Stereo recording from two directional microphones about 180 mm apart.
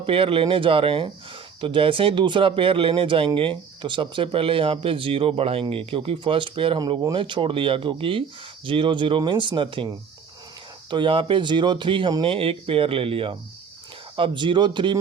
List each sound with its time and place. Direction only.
0.0 s speech: 30° right (ahead or behind)